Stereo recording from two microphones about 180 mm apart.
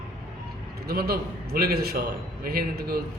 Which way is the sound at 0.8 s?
60° right (ahead or behind).